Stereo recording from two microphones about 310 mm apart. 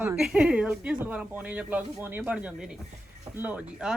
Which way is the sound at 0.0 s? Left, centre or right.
Centre.